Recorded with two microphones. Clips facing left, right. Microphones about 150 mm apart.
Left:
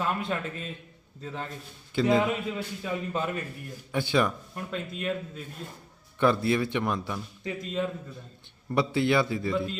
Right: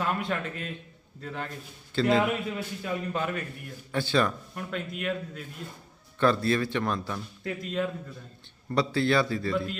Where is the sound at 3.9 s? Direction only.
15° left (ahead or behind).